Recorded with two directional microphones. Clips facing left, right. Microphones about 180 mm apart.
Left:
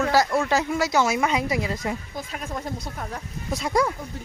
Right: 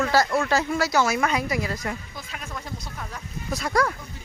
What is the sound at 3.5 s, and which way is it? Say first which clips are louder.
Speech: left 1 dB; 25° left (ahead or behind).